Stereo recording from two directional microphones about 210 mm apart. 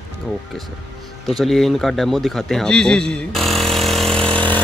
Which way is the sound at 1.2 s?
Centre (ahead or behind).